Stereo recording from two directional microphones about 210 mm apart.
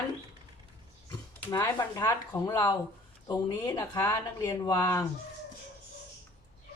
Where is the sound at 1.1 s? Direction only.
15° left (ahead or behind).